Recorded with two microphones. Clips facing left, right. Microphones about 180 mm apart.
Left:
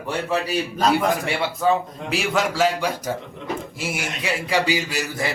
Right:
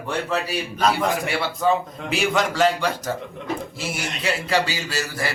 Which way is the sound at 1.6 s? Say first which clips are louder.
Even; 5° left (ahead or behind).